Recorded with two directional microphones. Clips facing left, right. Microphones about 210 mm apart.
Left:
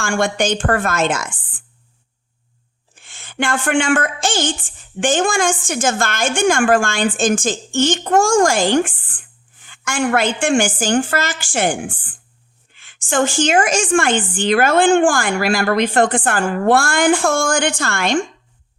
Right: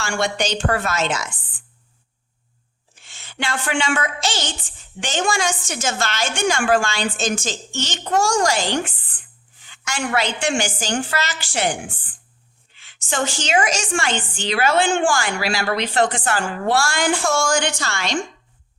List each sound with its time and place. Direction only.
0.0 s a woman's voice: 50° left (ahead or behind)
2.9 s a woman's voice: 55° left (ahead or behind)
9.6 s a sound: 50° left (ahead or behind)
10.4 s a woman's voice: 50° left (ahead or behind)